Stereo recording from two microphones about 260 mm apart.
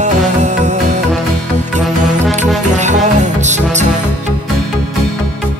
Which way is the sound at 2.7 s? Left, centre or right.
Right.